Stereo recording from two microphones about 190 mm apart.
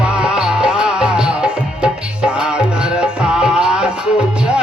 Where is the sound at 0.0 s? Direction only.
5° right (ahead or behind).